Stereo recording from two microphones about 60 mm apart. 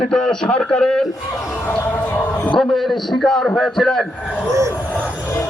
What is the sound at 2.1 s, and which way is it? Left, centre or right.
Music, left.